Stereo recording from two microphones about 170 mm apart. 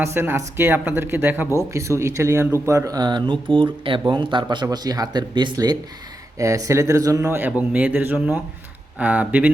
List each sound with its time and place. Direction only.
0.0 s a man's voice: 15° right (ahead or behind)